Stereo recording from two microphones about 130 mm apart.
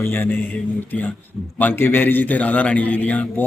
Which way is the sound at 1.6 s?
15° left (ahead or behind).